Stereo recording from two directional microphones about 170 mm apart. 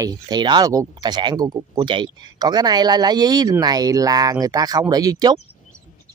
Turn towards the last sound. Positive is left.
turn(degrees=-20)  # may be behind; listen again after turning